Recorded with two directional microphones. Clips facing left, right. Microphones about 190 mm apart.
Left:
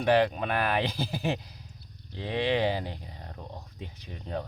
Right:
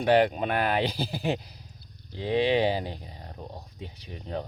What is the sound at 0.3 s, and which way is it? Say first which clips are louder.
Speech: right 2 dB; 15° right (ahead or behind).